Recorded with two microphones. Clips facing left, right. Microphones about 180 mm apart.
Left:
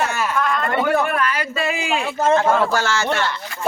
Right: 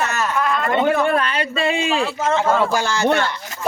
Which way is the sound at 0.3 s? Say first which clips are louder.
Right 1 dB; 5° right (ahead or behind).